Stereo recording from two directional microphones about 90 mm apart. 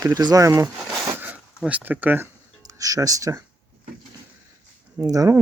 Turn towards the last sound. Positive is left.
turn(degrees=-40)  # may be behind; listen again after turning